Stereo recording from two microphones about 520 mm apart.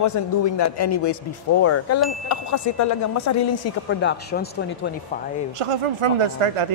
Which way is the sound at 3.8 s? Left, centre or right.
Left.